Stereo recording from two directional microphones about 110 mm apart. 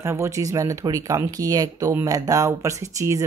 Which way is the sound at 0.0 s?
25° right (ahead or behind).